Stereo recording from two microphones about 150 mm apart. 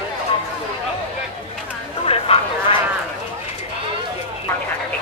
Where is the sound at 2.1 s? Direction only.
40° left (ahead or behind).